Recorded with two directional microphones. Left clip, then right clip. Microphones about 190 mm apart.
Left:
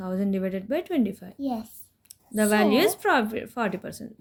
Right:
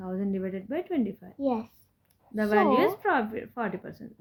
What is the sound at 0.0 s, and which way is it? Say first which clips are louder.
Speech: left 4 dB; 30° left (ahead or behind).